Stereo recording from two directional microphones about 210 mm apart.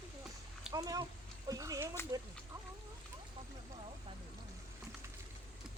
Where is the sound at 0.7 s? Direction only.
15° right (ahead or behind).